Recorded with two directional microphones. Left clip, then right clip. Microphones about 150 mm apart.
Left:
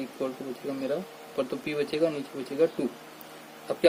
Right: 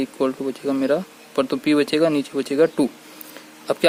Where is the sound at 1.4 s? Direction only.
50° right (ahead or behind).